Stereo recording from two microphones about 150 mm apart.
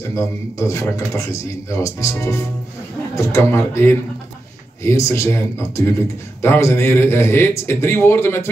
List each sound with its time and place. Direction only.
0.1 s a man's voice: 20° left (ahead or behind)